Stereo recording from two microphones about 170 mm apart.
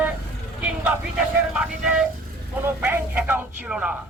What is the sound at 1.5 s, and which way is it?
Speech, 5° right (ahead or behind).